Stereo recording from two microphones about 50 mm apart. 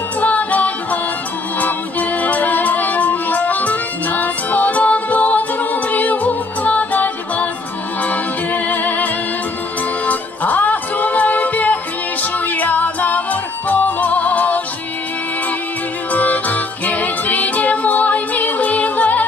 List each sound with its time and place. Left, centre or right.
0.2 s music: left
16.1 s music: left